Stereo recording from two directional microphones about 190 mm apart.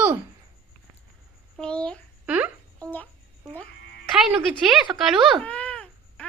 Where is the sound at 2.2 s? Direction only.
10° right (ahead or behind).